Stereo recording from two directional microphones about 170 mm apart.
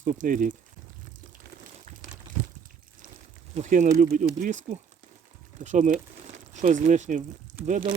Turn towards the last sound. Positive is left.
turn(degrees=-10)  # may be behind; listen again after turning